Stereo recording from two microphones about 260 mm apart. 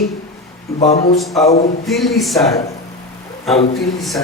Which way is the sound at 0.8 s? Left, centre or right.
Left.